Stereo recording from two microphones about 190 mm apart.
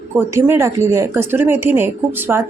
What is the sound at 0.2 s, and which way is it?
Speech, 10° right (ahead or behind).